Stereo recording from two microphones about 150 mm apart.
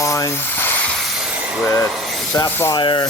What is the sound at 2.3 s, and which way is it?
Speech, 20° left (ahead or behind).